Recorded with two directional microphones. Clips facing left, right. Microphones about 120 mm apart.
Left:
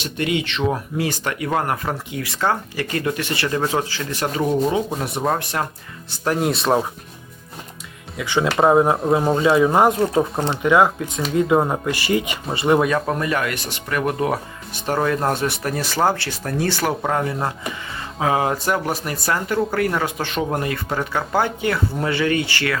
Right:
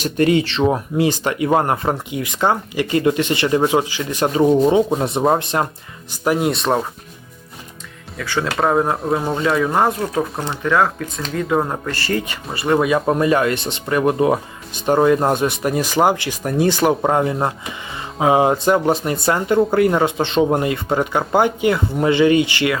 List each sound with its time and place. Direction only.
0.0 s speech: 40° right (ahead or behind); by 4.3 s 20° right (ahead or behind)
4.4 s speech: 30° right (ahead or behind)
6.1 s speech: 5° right (ahead or behind)
8.2 s speech: 15° left (ahead or behind)
9.0 s speech: 5° left (ahead or behind)
10.4 s speech: 25° left (ahead or behind)
10.7 s speech: 15° left (ahead or behind)
13.1 s speech: 25° right (ahead or behind)